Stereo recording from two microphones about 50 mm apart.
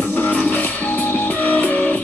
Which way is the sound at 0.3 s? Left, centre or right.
Left.